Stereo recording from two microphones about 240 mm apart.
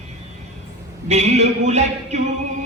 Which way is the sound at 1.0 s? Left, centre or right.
Right.